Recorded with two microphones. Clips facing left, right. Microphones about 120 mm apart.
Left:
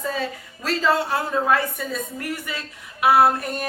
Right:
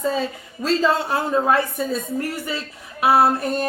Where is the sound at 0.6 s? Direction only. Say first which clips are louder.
Right 2 dB; 25° right (ahead or behind).